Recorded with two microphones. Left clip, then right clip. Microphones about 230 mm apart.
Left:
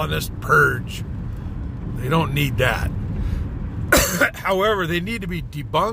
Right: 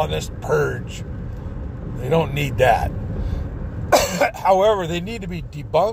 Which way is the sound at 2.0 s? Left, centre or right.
Centre.